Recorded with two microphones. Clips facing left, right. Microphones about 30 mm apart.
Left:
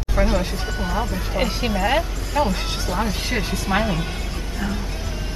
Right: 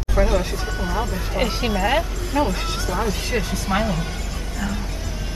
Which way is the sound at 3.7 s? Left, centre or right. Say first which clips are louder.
Left 1 dB; left.